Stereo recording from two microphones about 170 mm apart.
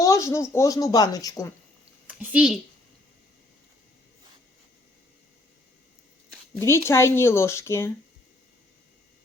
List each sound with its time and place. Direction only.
0.0 s a sound: 20° left (ahead or behind)
0.5 s speech: 20° left (ahead or behind)
2.0 s speech: 5° right (ahead or behind)
6.6 s speech: 15° left (ahead or behind)